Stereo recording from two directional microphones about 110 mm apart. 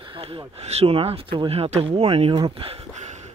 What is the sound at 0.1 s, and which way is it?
Speech, 60° right (ahead or behind).